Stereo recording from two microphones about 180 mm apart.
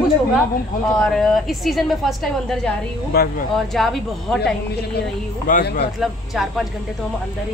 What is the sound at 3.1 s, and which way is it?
Speech, 60° left (ahead or behind).